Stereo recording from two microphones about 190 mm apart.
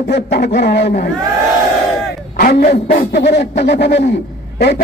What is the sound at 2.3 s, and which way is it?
Speech, 50° left (ahead or behind).